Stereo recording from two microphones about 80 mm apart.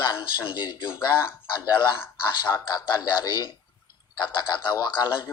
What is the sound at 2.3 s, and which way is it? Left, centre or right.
Speech, left.